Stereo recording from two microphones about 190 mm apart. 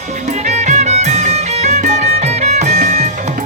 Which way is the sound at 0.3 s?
35° right (ahead or behind).